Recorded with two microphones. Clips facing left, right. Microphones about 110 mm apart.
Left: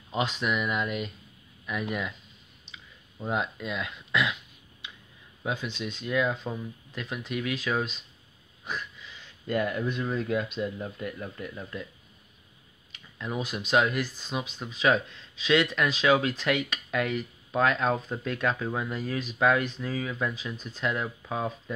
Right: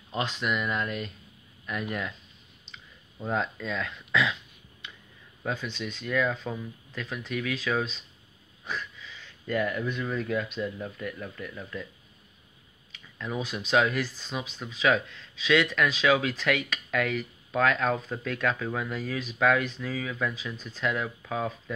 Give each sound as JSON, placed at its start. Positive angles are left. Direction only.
{"t": 0.1, "sound": "speech", "side_deg": 15}
{"t": 3.2, "sound": "speech", "side_deg": 15}
{"t": 5.4, "sound": "speech", "side_deg": 15}
{"t": 13.2, "sound": "speech", "side_deg": 15}